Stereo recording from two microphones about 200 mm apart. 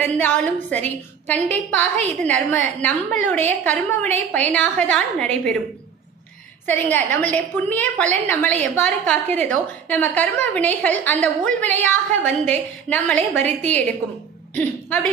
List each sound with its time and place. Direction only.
0.0 s a woman's voice: 10° left (ahead or behind)
6.7 s a woman's voice: 10° left (ahead or behind)